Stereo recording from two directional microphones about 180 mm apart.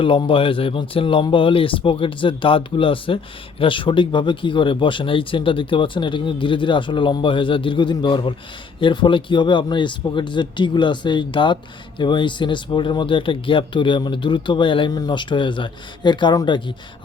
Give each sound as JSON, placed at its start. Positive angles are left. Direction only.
{"t": 0.0, "sound": "speech", "side_deg": 30}